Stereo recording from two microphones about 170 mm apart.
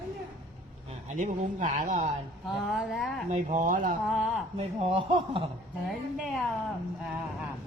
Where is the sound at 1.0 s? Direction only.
50° right (ahead or behind).